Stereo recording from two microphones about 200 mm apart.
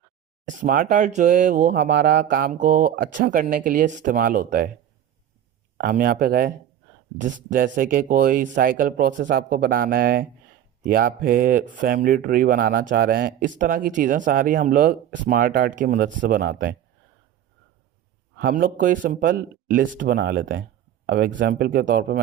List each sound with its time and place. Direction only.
0.4 s speech: 40° right (ahead or behind)
5.7 s speech: 45° right (ahead or behind)
18.3 s speech: 45° right (ahead or behind)